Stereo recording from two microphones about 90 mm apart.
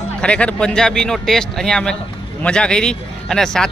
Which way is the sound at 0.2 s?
15° left (ahead or behind).